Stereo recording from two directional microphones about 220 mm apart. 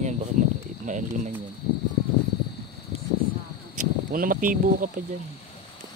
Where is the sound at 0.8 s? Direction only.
35° right (ahead or behind).